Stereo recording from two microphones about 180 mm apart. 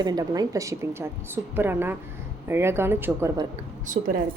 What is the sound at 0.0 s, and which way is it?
A woman's voice, 20° right (ahead or behind).